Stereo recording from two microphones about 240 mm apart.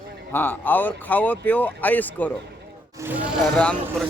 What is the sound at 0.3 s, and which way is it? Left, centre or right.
Speech, centre.